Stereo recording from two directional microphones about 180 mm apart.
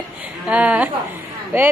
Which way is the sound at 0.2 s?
5° right (ahead or behind).